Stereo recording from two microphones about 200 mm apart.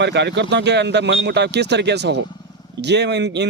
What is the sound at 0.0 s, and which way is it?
Speech, 60° right (ahead or behind).